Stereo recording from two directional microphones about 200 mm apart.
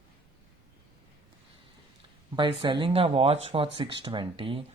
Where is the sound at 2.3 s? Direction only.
25° right (ahead or behind).